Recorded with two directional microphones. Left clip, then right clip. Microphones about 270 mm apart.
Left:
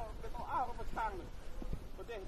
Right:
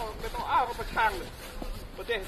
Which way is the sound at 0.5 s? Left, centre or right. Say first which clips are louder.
Right 12 dB; left.